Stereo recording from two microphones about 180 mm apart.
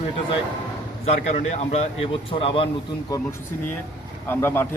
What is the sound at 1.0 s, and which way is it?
Speech, 35° left (ahead or behind).